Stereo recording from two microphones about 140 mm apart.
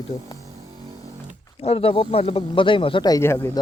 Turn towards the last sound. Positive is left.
turn(degrees=15)  # may be behind; listen again after turning